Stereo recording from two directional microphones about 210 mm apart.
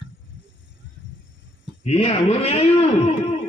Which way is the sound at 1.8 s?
30° left (ahead or behind).